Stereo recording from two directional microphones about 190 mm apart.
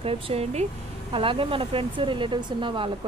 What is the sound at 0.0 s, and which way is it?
A woman's voice, 30° right (ahead or behind).